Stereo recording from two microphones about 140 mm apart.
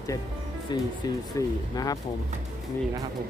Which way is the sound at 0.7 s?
30° left (ahead or behind).